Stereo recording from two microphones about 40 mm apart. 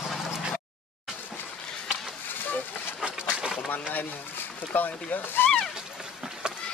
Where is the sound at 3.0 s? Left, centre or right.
Right.